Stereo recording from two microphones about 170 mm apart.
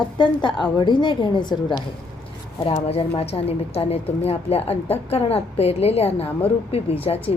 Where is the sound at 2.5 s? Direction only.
30° left (ahead or behind).